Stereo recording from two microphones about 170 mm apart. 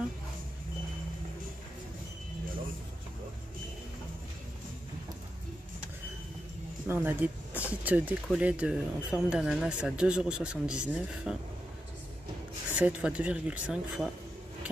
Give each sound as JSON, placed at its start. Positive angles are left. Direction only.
{"t": 6.9, "sound": "speech", "side_deg": -10}
{"t": 12.7, "sound": "speech", "side_deg": -10}